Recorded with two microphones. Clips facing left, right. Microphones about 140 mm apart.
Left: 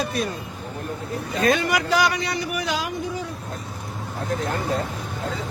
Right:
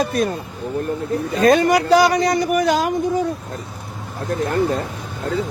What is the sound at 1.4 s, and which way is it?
Speech, 40° right (ahead or behind).